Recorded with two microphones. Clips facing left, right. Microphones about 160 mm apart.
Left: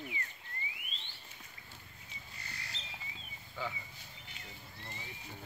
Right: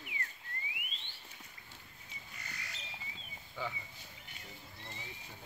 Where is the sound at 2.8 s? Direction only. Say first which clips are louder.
Even; 30° left (ahead or behind).